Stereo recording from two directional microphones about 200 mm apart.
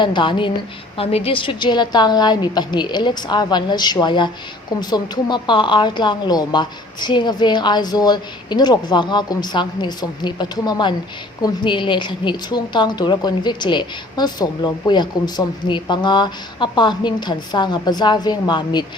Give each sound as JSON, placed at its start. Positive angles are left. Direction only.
{"t": 0.0, "sound": "a woman's voice", "side_deg": 25}